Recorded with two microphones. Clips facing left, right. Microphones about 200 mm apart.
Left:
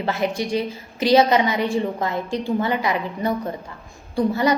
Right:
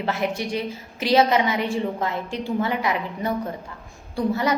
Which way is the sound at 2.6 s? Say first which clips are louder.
Left 2 dB; centre (ahead or behind).